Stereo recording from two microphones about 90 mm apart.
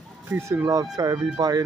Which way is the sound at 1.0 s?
45° right (ahead or behind).